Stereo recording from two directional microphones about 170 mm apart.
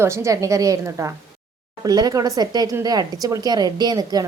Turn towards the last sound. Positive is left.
turn(degrees=-20)  # may be behind; listen again after turning